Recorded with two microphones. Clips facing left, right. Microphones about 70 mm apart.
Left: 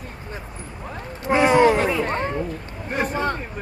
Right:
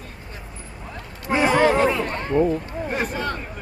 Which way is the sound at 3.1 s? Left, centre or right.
Left.